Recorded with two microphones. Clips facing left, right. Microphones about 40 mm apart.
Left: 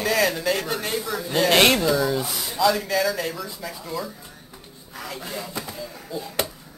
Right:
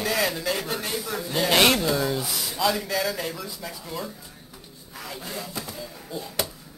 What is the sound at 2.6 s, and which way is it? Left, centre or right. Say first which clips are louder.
Speech: left 4 dB; centre.